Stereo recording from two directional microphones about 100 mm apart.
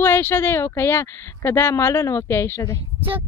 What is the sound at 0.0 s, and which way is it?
Speech, 20° left (ahead or behind).